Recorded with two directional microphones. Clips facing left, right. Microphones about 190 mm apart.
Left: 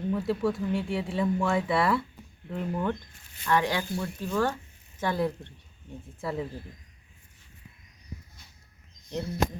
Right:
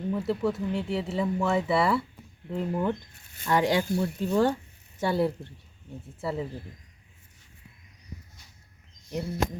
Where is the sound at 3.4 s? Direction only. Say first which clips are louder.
Right 2 dB; 20° right (ahead or behind).